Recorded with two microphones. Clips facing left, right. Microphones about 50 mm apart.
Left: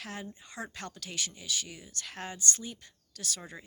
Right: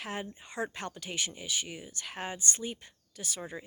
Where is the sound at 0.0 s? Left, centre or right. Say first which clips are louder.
Right 3 dB; right.